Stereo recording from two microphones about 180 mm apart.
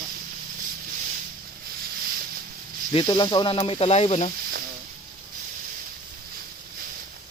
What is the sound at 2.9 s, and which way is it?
Speech, 25° left (ahead or behind).